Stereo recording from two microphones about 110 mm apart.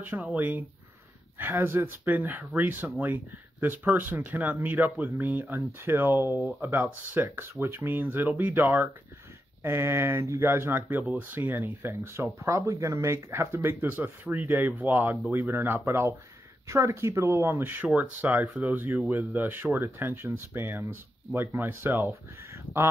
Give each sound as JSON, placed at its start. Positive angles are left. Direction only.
{"t": 0.0, "sound": "speech", "side_deg": -15}